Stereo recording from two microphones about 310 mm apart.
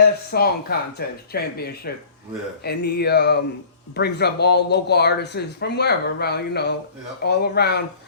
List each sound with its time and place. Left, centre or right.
0.0 s speech: left